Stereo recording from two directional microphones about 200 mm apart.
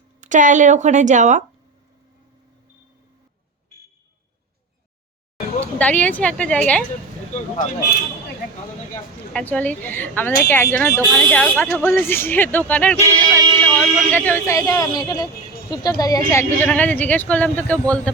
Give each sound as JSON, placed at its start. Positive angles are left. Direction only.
{"t": 0.2, "sound": "speech", "side_deg": -40}
{"t": 5.8, "sound": "speech", "side_deg": 5}
{"t": 9.3, "sound": "speech", "side_deg": 10}